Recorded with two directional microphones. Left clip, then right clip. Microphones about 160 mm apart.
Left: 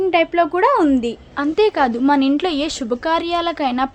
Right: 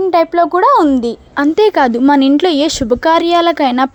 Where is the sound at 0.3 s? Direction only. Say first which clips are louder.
Right 7 dB; 30° right (ahead or behind).